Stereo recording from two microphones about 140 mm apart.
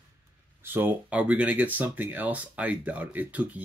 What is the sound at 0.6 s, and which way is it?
Speech, 15° right (ahead or behind).